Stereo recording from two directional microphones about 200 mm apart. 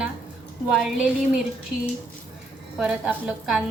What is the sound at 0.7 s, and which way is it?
Speech, centre (ahead or behind).